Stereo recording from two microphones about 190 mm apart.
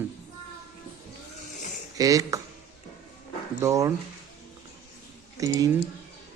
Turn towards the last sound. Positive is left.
turn(degrees=-20)  # may be behind; listen again after turning